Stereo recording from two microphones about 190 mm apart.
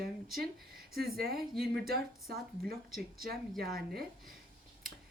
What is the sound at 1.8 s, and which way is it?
Speech, 55° right (ahead or behind).